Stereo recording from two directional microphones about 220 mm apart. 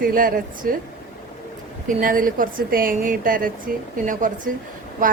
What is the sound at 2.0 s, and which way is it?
Speech, 40° right (ahead or behind).